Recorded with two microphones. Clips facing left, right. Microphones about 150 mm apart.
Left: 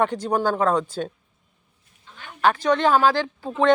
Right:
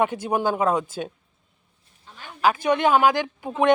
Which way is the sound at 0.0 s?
10° right (ahead or behind).